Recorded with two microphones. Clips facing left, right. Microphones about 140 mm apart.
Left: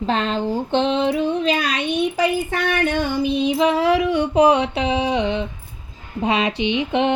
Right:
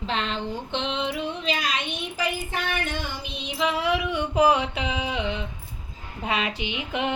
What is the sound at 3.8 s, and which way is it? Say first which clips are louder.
Child singing: left 8 dB; 90° left.